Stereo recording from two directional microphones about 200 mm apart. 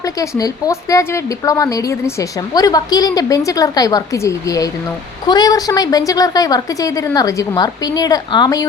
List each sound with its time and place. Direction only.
0.0 s speech: 15° left (ahead or behind)